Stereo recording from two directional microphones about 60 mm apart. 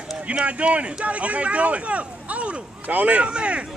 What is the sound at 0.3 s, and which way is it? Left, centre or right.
Speech, right.